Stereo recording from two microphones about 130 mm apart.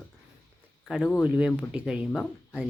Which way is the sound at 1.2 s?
10° right (ahead or behind).